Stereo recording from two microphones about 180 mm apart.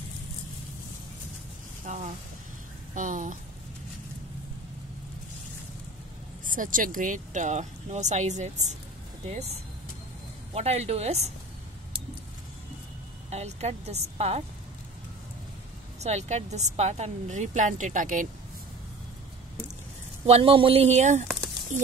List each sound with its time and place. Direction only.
1.9 s a woman's voice: 40° right (ahead or behind)
6.4 s a woman's voice: 50° right (ahead or behind)
13.3 s a woman's voice: 35° right (ahead or behind)
16.0 s a woman's voice: 40° right (ahead or behind)
20.2 s a woman's voice: 30° right (ahead or behind)